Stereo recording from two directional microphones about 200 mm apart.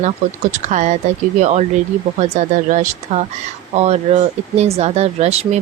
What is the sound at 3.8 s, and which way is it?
Speech, 30° right (ahead or behind).